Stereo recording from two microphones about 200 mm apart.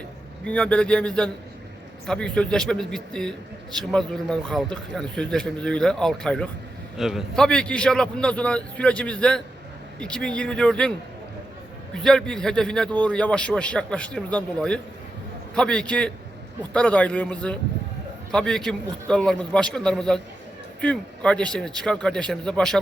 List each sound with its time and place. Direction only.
0.4 s a man's voice: 5° left (ahead or behind)
11.9 s a man's voice: 5° left (ahead or behind)